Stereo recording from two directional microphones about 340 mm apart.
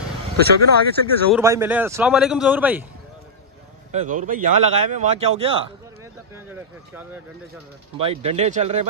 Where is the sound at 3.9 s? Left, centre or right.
Right.